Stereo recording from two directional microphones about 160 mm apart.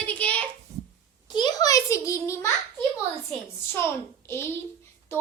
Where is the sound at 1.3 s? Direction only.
25° left (ahead or behind).